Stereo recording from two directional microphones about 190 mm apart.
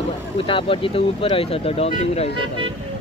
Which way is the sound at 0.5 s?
30° left (ahead or behind).